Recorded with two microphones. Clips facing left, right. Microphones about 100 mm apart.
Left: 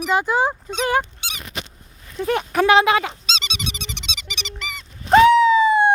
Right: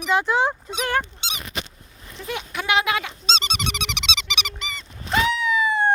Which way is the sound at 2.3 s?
45° left (ahead or behind).